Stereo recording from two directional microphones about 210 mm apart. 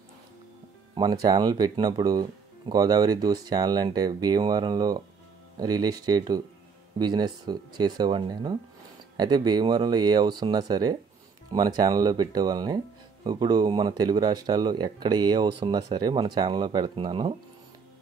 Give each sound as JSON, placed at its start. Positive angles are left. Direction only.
{"t": 0.9, "sound": "speech", "side_deg": -20}